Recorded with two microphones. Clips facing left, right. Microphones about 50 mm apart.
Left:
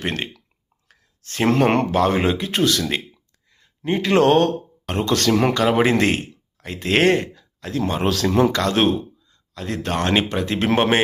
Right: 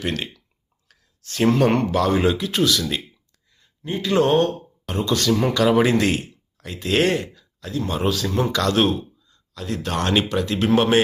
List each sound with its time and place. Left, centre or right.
0.0 s speech: left
0.9 s a sound: left
1.9 s speech: left
5.5 s speech: left
8.1 s a man's voice: left
8.5 s speech: left
10.0 s speech: left